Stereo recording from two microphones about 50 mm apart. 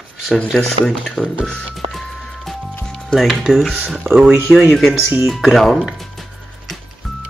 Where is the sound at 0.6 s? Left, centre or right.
Centre.